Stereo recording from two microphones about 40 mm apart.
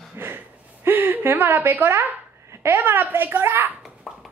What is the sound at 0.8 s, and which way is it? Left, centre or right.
A woman's voice, right.